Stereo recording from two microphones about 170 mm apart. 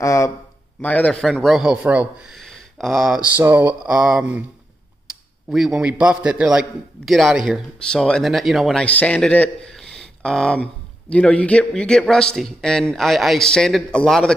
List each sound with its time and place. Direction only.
0.0 s a sound: 15° left (ahead or behind)
0.7 s a man's voice: 10° left (ahead or behind)
3.3 s speech: 10° right (ahead or behind)
5.5 s a man's voice: centre (ahead or behind)